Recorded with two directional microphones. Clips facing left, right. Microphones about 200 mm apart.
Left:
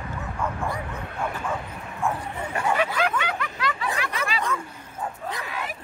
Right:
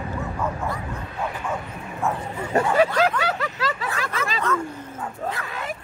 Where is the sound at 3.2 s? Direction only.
40° right (ahead or behind).